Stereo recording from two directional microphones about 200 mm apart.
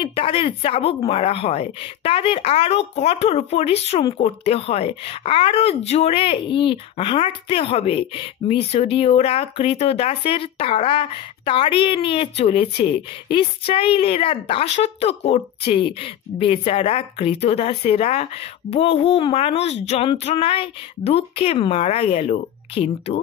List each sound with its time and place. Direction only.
0.0 s speech: 30° left (ahead or behind)